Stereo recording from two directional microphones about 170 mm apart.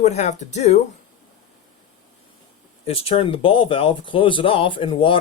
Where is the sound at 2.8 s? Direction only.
35° left (ahead or behind).